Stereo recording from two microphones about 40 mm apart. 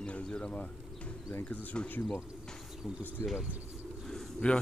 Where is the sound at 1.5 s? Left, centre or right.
Left.